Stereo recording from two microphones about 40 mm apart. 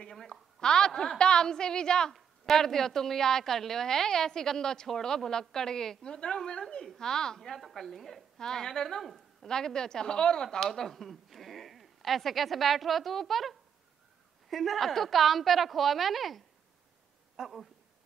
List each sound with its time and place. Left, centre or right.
0.1 s a woman's voice: centre
7.5 s speech: centre
8.4 s a woman's voice: centre